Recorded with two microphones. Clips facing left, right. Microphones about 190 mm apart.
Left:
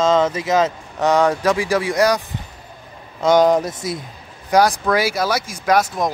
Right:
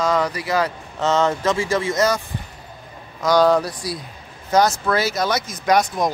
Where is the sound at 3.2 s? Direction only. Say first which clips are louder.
Left 2 dB; 20° left (ahead or behind).